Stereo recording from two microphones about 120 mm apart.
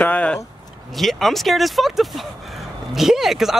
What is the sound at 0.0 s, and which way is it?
Speech, 10° left (ahead or behind).